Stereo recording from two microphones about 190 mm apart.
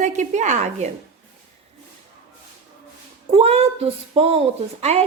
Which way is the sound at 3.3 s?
35° right (ahead or behind).